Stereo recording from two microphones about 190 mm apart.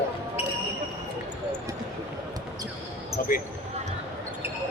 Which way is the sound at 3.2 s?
50° left (ahead or behind).